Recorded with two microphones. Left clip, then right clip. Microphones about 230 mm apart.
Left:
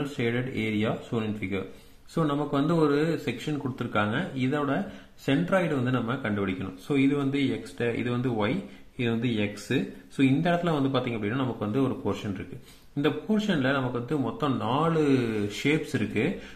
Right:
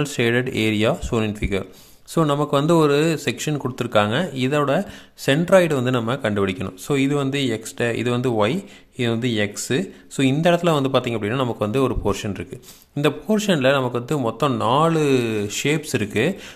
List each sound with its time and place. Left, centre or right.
0.2 s speech: right